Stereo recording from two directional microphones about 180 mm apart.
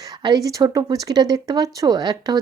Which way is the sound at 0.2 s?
25° right (ahead or behind).